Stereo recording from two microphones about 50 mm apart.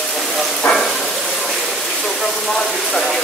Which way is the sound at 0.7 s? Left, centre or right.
Left.